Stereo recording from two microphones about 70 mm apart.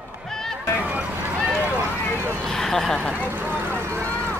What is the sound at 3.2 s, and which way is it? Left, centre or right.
Vehicle, right.